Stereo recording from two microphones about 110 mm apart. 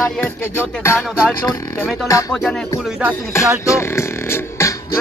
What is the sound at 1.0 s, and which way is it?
Speech, centre (ahead or behind).